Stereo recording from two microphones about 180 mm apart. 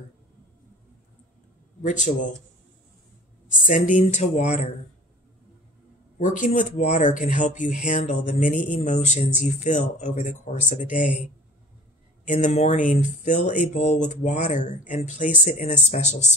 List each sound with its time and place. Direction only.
1.8 s speech: 40° left (ahead or behind)
3.6 s speech: 45° left (ahead or behind)
6.1 s speech: 45° left (ahead or behind)
12.3 s speech: 40° left (ahead or behind)